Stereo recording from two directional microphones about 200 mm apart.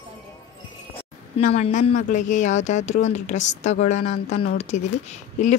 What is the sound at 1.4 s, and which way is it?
Speech, 35° left (ahead or behind).